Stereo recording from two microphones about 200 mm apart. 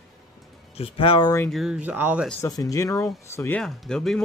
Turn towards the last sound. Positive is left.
turn(degrees=5)  # may be behind; listen again after turning